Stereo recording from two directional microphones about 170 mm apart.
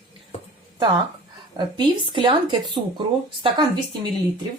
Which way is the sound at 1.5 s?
30° right (ahead or behind).